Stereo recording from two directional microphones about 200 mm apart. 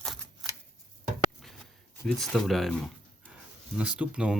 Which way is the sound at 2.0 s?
5° left (ahead or behind).